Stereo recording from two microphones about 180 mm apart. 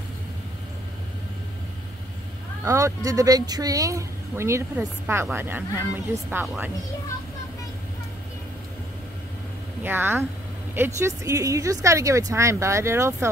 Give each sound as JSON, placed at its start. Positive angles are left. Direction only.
{"t": 2.6, "sound": "speech", "side_deg": -15}
{"t": 9.8, "sound": "speech", "side_deg": -10}